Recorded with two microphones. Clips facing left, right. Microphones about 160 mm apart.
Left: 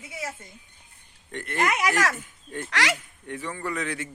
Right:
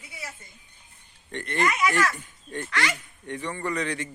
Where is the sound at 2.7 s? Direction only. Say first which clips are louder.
Left 2 dB; 90° left.